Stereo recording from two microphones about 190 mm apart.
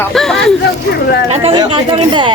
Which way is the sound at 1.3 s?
30° right (ahead or behind).